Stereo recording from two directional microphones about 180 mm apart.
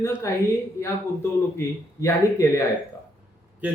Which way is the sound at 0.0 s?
15° left (ahead or behind).